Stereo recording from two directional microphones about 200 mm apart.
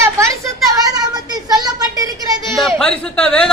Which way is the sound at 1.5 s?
20° right (ahead or behind).